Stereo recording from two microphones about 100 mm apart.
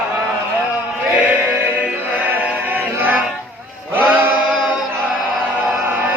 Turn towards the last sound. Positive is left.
turn(degrees=-15)  # may be behind; listen again after turning